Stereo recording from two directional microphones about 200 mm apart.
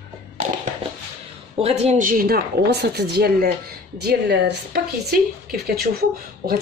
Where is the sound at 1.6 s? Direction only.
30° right (ahead or behind).